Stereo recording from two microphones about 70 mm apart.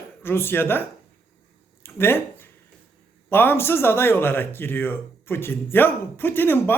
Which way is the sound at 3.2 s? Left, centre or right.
Left.